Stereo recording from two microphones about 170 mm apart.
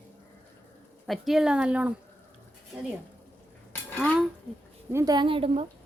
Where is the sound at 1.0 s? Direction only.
Centre (ahead or behind).